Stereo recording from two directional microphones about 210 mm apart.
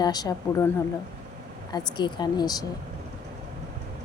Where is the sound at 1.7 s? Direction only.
20° left (ahead or behind).